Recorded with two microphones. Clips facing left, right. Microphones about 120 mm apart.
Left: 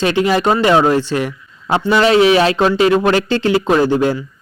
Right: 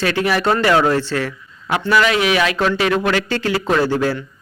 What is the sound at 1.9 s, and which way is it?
Speech, 30° left (ahead or behind).